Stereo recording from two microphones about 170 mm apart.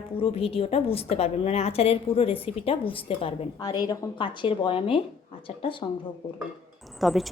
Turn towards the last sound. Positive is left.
turn(degrees=0)  # may be behind; listen again after turning